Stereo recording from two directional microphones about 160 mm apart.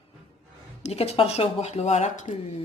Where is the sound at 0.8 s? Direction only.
40° left (ahead or behind).